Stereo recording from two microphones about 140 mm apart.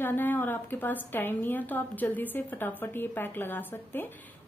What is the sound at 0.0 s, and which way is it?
A woman's voice, 15° left (ahead or behind).